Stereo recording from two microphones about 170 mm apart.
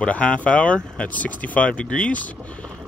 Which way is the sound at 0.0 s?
5° left (ahead or behind).